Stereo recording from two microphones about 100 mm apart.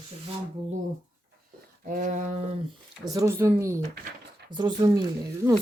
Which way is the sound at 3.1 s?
25° right (ahead or behind).